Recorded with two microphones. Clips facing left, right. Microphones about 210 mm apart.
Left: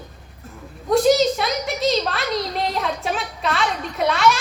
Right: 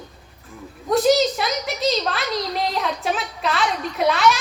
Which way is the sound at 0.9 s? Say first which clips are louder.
Left 1 dB; centre (ahead or behind).